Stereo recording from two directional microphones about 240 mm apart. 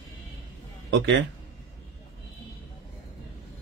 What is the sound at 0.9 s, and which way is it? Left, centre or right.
Speech, right.